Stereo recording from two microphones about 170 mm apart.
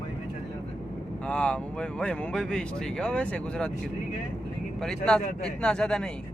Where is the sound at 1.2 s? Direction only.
5° left (ahead or behind).